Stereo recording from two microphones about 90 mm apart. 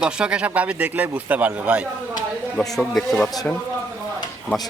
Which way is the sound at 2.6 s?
5° left (ahead or behind).